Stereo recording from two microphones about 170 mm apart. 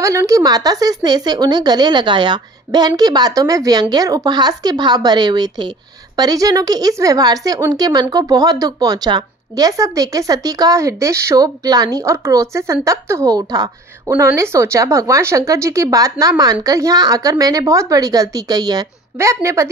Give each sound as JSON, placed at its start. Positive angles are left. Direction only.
{"t": 0.0, "sound": "a woman's voice", "side_deg": -20}